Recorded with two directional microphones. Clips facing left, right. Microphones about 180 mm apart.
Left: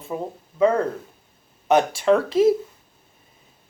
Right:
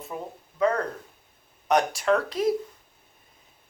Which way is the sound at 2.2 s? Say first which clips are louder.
Left 8 dB; 25° left (ahead or behind).